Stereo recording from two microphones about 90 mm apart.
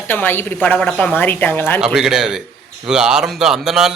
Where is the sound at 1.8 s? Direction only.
5° right (ahead or behind).